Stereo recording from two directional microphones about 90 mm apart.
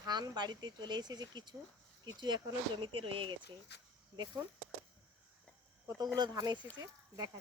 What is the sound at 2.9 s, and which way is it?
Speech, 85° right.